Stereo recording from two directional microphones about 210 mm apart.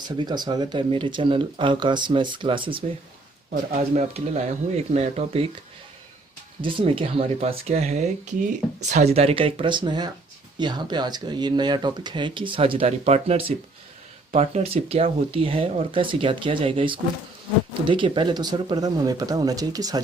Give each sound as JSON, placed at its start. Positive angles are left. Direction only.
{"t": 0.2, "sound": "speech", "side_deg": -20}
{"t": 3.5, "sound": "speech", "side_deg": -40}
{"t": 6.6, "sound": "speech", "side_deg": -25}